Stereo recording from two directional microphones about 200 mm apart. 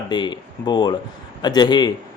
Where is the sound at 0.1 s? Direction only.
20° left (ahead or behind).